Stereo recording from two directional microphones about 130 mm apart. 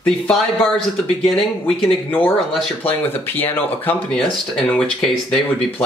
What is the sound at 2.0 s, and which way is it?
Speech, 15° left (ahead or behind).